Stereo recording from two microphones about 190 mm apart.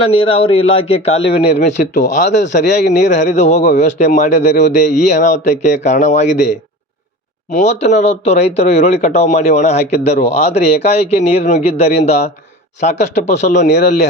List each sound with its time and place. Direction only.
0.0 s speech: 30° left (ahead or behind)